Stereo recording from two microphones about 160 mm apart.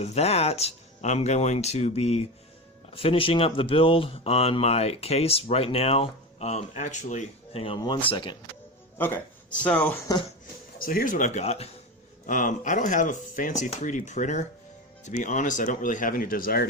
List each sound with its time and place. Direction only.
0.0 s speech: 40° left (ahead or behind)
9.0 s speech: 15° left (ahead or behind)
10.8 s speech: 65° left (ahead or behind); by 11.7 s 40° left (ahead or behind)
12.2 s speech: 55° left (ahead or behind)